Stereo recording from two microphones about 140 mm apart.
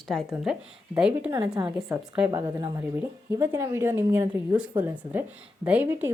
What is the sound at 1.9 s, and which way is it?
Speech, 10° right (ahead or behind).